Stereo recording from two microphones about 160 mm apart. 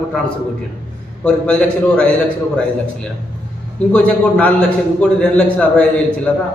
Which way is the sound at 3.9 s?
10° left (ahead or behind).